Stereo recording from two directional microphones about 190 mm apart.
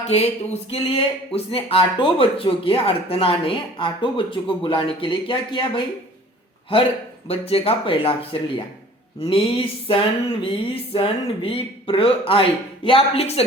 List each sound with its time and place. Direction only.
0.0 s speech: 35° left (ahead or behind)
7.3 s speech: 30° left (ahead or behind)